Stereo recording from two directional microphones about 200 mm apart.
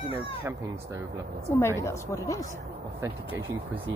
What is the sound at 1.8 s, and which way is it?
Speech, 15° left (ahead or behind).